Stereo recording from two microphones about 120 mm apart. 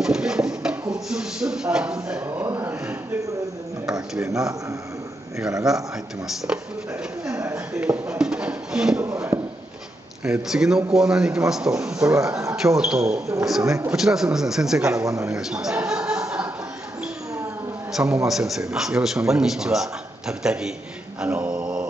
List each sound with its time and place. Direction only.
0.0 s a sound: 5° right (ahead or behind)
0.9 s speech: 5° right (ahead or behind)
2.2 s speech: 15° right (ahead or behind)
5.7 s a man's voice: 5° right (ahead or behind)
7.5 s a sound: 10° right (ahead or behind)
10.2 s a man's voice: 5° right (ahead or behind)
12.1 s speech: 25° right (ahead or behind)
12.5 s a man's voice: 5° right (ahead or behind)
13.6 s speech: 25° right (ahead or behind)
13.8 s a man's voice: 5° right (ahead or behind)
15.0 s speech: 30° right (ahead or behind)
15.3 s chuckle: 5° right (ahead or behind)
17.9 s a man's voice: 5° right (ahead or behind)
21.2 s mantra: 10° right (ahead or behind)